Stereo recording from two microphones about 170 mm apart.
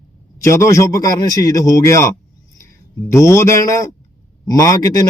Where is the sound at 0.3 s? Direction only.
15° left (ahead or behind).